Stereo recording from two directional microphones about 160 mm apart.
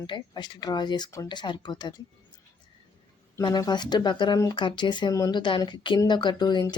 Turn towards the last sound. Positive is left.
turn(degrees=30)  # may be behind; listen again after turning